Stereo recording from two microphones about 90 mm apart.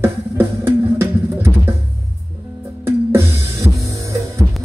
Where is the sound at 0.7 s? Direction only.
30° right (ahead or behind).